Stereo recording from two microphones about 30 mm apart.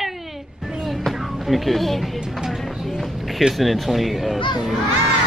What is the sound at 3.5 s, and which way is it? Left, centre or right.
Speech, centre.